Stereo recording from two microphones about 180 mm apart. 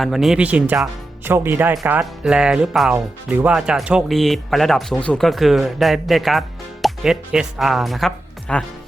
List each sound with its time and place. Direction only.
0.0 s speech: centre (ahead or behind)